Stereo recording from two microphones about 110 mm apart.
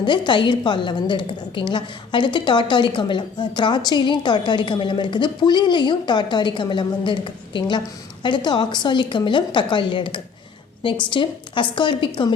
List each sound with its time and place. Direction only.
0.0 s a woman's voice: 45° left (ahead or behind)